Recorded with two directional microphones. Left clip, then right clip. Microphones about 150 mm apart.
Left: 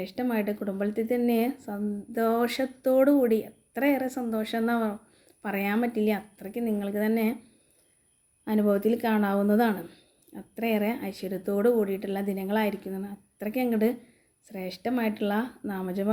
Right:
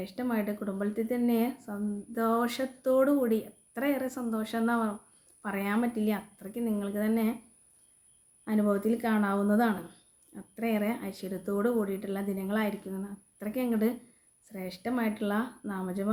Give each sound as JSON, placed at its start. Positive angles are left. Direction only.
{"t": 0.0, "sound": "speech", "side_deg": 25}
{"t": 8.4, "sound": "speech", "side_deg": 25}